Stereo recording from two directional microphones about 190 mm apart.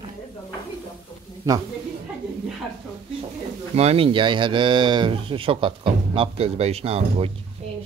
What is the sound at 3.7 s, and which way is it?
A woman's voice, 30° right (ahead or behind).